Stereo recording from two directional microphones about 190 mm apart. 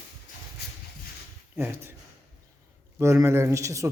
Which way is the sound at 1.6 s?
10° right (ahead or behind).